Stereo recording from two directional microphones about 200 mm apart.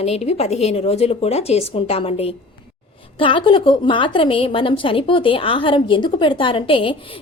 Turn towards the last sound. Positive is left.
turn(degrees=25)  # may be behind; listen again after turning